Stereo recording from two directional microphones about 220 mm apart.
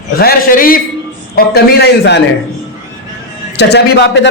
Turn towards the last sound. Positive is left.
turn(degrees=50)  # may be behind; listen again after turning